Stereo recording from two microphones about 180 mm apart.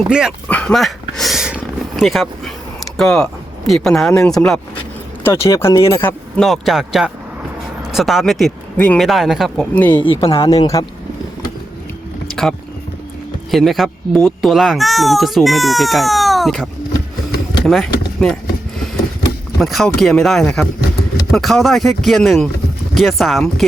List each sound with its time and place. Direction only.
0.1 s speech: 5° right (ahead or behind)
0.4 s a sound: 5° left (ahead or behind)
3.7 s speech: centre (ahead or behind)
5.2 s speech: 15° left (ahead or behind)
10.2 s speech: 30° left (ahead or behind)
13.5 s speech: centre (ahead or behind)
17.7 s speech: 5° left (ahead or behind)
19.5 s speech: centre (ahead or behind)